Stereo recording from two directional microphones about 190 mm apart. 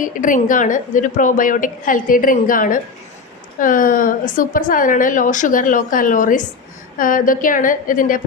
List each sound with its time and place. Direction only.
0.0 s a woman's voice: 45° left (ahead or behind)